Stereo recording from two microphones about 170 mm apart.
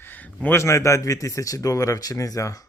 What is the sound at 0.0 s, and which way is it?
Speech, 10° left (ahead or behind).